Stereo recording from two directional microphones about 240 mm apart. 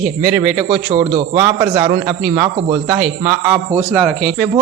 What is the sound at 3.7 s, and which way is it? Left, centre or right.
Speech, centre.